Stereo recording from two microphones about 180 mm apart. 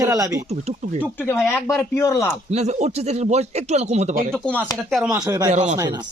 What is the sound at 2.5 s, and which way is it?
Speech, 40° right (ahead or behind).